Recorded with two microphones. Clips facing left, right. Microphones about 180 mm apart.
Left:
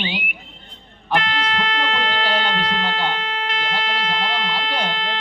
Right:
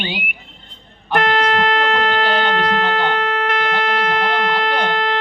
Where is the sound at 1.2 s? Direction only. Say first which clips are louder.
Right 8 dB; 50° right (ahead or behind).